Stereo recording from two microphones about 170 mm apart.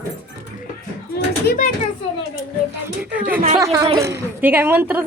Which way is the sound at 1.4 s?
55° left (ahead or behind).